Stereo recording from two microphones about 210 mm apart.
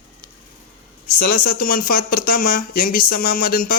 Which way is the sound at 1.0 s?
45° left (ahead or behind).